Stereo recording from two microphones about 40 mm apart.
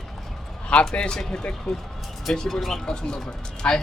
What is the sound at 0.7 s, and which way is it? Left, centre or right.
Speech, left.